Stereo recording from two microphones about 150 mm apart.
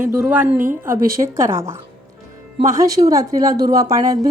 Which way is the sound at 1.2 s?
20° right (ahead or behind).